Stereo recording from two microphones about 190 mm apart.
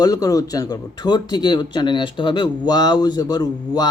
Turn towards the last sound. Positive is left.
turn(degrees=20)  # may be behind; listen again after turning